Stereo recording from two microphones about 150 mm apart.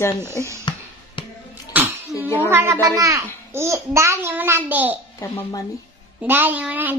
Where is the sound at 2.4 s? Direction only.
15° right (ahead or behind).